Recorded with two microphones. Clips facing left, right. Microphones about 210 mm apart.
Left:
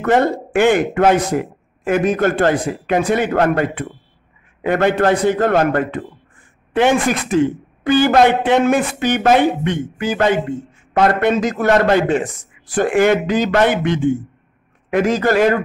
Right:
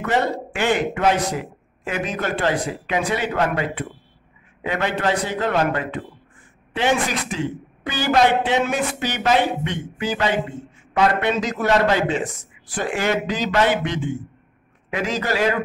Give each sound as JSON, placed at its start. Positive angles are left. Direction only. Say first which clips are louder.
{"t": 0.0, "sound": "a man's voice", "louder": "left 6 dB", "side_deg": 50}